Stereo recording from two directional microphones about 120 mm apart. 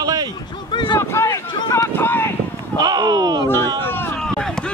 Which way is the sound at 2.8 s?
35° right (ahead or behind).